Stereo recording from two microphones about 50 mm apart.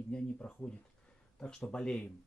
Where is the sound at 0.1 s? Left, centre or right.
Centre.